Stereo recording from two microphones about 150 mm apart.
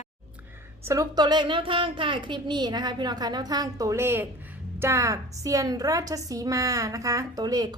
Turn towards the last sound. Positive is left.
turn(degrees=-25)  # may be behind; listen again after turning